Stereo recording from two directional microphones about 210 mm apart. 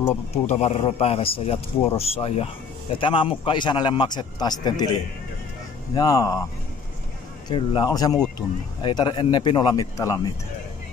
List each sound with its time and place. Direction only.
0.3 s speech: 30° left (ahead or behind)
5.9 s a man's voice: 15° left (ahead or behind)
7.4 s a man's voice: 20° left (ahead or behind)